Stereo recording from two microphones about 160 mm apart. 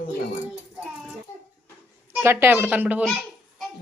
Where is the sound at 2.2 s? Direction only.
15° right (ahead or behind).